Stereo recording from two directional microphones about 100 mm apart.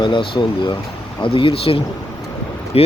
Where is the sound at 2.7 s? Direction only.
85° left.